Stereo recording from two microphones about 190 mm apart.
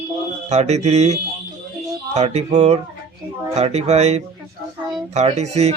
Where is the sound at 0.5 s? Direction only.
35° right (ahead or behind).